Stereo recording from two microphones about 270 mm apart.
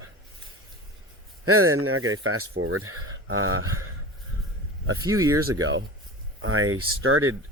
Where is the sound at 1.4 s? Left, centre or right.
Right.